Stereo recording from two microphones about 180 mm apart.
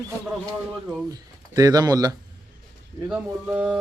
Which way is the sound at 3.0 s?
5° right (ahead or behind).